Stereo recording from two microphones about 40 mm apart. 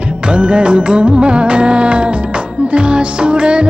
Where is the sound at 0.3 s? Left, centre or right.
Right.